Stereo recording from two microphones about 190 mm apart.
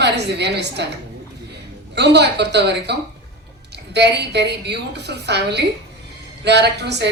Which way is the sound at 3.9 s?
60° right (ahead or behind).